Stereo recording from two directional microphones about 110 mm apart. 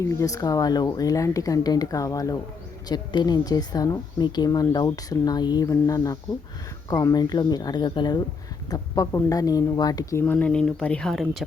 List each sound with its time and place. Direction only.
0.0 s speech: 30° left (ahead or behind)
10.3 s speech: 5° left (ahead or behind)